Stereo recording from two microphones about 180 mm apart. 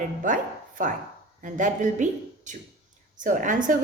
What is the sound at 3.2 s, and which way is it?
Speech, 45° right (ahead or behind).